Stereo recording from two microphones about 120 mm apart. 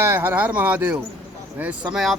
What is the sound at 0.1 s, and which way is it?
Speech, 15° right (ahead or behind).